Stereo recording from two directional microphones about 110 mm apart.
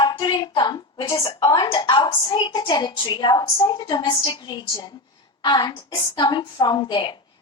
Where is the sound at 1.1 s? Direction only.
45° left (ahead or behind).